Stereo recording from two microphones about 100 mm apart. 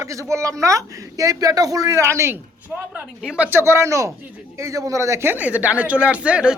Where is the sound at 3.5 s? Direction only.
30° right (ahead or behind).